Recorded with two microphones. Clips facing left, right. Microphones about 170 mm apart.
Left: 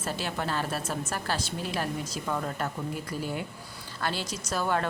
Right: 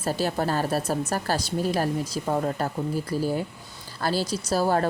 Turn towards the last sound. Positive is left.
turn(degrees=-35)  # may be behind; listen again after turning